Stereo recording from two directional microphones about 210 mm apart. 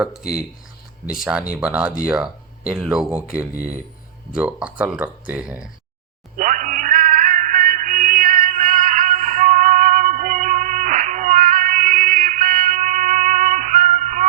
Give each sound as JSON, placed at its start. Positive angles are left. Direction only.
{"t": 0.0, "sound": "speech", "side_deg": -5}
{"t": 6.3, "sound": "music", "side_deg": -40}